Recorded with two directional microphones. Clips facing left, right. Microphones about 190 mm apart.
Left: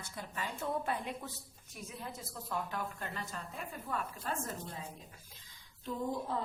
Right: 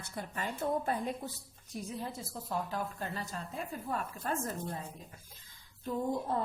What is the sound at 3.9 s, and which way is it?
Speech, 45° right (ahead or behind).